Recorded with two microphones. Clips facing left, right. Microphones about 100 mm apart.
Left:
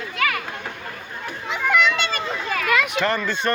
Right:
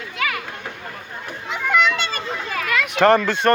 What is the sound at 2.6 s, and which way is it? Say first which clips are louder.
Children playing: left 3 dB; 15° left (ahead or behind).